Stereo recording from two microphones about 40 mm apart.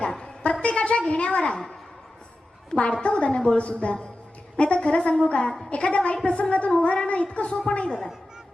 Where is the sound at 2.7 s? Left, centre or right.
Left.